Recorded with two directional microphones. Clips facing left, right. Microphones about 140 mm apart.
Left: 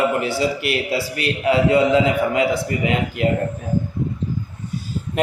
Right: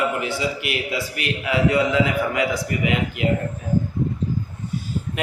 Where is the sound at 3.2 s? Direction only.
45° left (ahead or behind).